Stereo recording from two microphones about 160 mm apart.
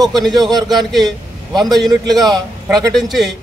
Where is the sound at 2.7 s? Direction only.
Centre (ahead or behind).